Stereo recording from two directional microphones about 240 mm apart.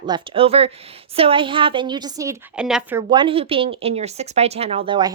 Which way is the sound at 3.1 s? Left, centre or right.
Right.